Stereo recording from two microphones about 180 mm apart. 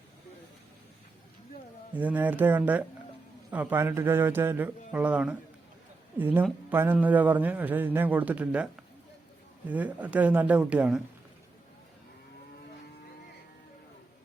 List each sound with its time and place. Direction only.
2.0 s a woman's voice: 10° right (ahead or behind)